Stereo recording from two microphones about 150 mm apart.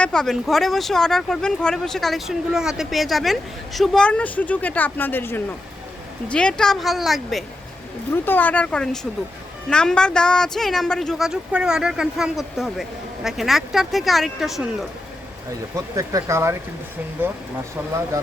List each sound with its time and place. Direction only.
0.0 s speech: 5° left (ahead or behind)
8.1 s speech: 15° left (ahead or behind); by 14.8 s centre (ahead or behind)
15.7 s speech: 20° right (ahead or behind)